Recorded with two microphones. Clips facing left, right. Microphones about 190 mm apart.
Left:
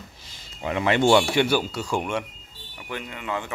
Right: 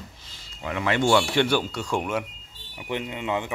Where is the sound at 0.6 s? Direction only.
25° left (ahead or behind).